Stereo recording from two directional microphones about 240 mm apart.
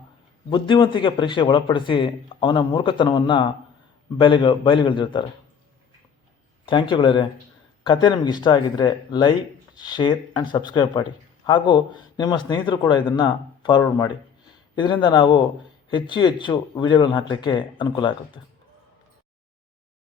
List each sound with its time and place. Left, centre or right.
0.5 s a man's voice: centre
6.7 s a man's voice: centre